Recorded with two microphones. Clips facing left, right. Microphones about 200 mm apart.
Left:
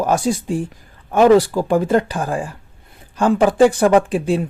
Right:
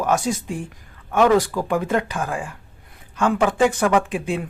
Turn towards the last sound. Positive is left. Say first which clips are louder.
# left 6 dB
turn(degrees=35)  # may be behind; listen again after turning